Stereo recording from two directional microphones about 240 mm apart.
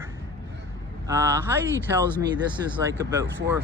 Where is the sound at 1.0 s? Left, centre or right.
Centre.